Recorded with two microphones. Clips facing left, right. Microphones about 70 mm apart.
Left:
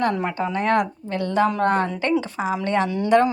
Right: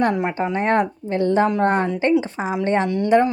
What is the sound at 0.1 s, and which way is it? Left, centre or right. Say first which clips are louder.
A woman's voice: right 2 dB; centre.